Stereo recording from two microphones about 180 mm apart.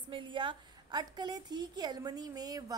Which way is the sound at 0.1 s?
30° right (ahead or behind).